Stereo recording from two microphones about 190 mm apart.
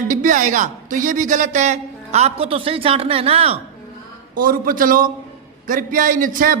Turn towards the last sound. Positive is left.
turn(degrees=-45)  # may be behind; listen again after turning